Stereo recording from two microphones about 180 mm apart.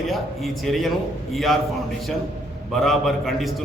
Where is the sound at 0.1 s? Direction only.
Centre (ahead or behind).